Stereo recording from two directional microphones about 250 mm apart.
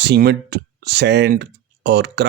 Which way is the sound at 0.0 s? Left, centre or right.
Right.